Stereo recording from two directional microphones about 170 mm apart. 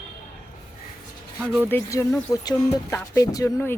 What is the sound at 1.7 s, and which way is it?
Speech, 15° left (ahead or behind).